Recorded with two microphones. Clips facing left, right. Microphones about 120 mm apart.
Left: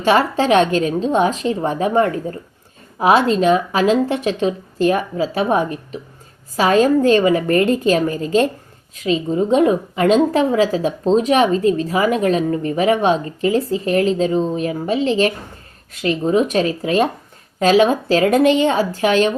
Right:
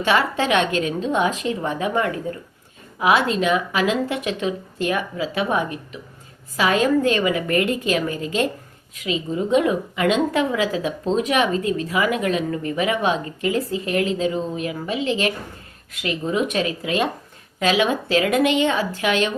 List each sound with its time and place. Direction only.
0.0 s a woman's voice: 35° left (ahead or behind)